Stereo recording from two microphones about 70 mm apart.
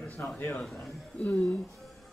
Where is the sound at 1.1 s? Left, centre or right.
Centre.